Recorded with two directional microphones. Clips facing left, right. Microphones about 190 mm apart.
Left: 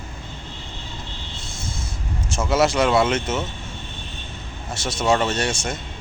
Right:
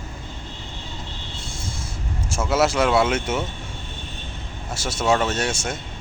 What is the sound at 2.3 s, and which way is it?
Speech, 5° right (ahead or behind).